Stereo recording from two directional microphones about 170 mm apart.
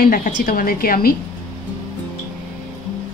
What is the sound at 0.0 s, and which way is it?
A woman's voice, 55° left (ahead or behind).